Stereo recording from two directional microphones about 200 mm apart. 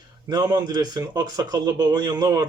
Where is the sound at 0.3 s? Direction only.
20° right (ahead or behind).